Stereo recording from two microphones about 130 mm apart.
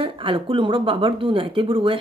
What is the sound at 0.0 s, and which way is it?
Speech, 40° right (ahead or behind).